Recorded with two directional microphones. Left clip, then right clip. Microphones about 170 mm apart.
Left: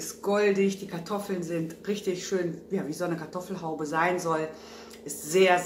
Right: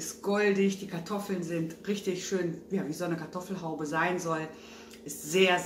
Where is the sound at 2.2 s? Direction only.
15° right (ahead or behind).